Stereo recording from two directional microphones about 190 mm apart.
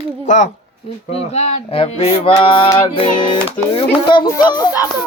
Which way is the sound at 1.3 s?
30° left (ahead or behind).